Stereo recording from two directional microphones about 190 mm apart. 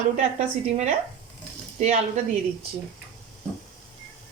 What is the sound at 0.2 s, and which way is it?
Speech, 35° right (ahead or behind).